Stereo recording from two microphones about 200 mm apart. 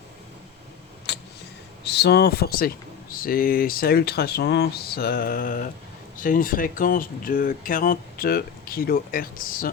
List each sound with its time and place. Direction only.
1.1 s vehicle: 55° left (ahead or behind)
1.8 s speech: 55° left (ahead or behind)